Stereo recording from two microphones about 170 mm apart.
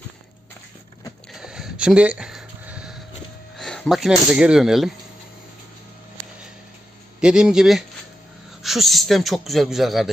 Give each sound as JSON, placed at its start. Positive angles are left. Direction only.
{"t": 1.3, "sound": "a sound", "side_deg": -5}
{"t": 3.6, "sound": "speech", "side_deg": 5}
{"t": 7.2, "sound": "a man's voice", "side_deg": -5}